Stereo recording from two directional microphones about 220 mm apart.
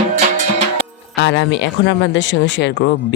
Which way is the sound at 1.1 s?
50° left (ahead or behind).